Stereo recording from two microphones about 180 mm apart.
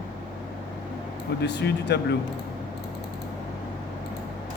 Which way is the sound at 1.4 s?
70° left (ahead or behind).